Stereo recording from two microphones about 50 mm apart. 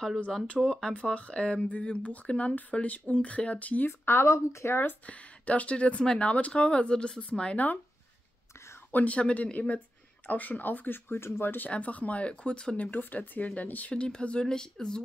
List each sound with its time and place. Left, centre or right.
0.7 s speech: centre
1.0 s speech: left
3.8 s speech: left
5.0 s speech: left
8.9 s speech: left
11.7 s speech: left
12.9 s speech: left
13.9 s speech: centre